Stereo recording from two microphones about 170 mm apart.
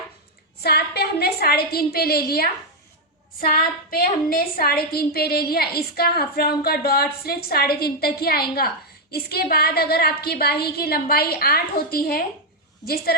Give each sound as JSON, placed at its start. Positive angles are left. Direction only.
{"t": 0.6, "sound": "a woman's voice", "side_deg": 70}